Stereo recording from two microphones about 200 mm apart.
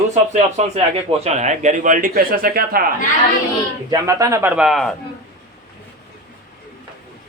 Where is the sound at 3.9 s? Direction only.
15° right (ahead or behind); by 4.9 s centre (ahead or behind).